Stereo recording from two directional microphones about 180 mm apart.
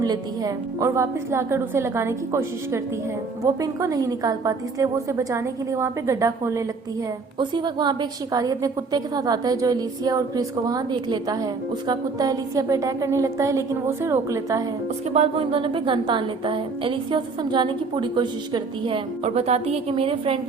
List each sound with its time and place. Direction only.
0.0 s a woman's voice: 20° right (ahead or behind)
15.1 s a woman's voice: 35° right (ahead or behind)